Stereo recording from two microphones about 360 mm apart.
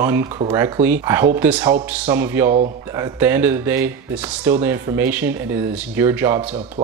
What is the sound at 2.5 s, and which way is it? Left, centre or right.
Speech, centre.